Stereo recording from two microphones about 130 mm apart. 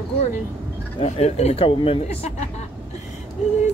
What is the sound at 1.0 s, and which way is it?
Speech, 55° left (ahead or behind).